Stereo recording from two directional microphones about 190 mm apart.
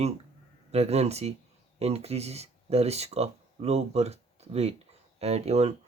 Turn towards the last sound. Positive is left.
turn(degrees=-35)  # may be behind; listen again after turning